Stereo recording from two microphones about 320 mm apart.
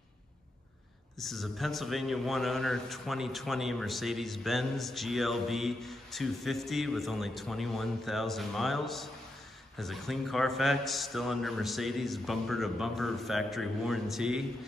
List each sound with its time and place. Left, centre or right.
1.2 s a man's voice: centre